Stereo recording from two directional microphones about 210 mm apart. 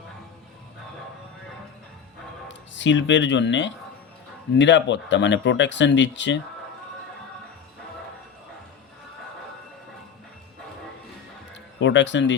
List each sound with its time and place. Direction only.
2.5 s speech: 60° left (ahead or behind)
11.8 s speech: 60° left (ahead or behind)